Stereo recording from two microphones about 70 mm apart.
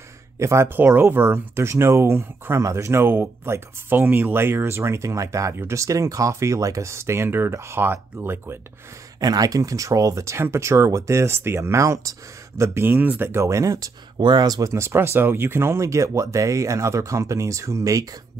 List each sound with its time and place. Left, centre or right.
0.4 s speech: right
0.7 s speech: right
9.2 s speech: right
12.8 s speech: right
13.3 s speech: right
14.6 s speech: right